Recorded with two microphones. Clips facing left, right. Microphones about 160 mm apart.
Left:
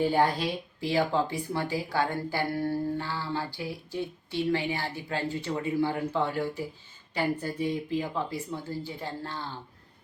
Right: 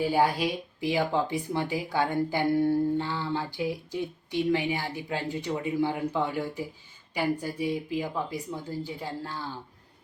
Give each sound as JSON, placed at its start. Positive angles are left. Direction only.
{"t": 0.0, "sound": "speech", "side_deg": -10}